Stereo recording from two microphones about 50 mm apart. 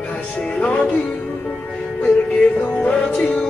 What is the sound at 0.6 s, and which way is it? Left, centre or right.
Music, left.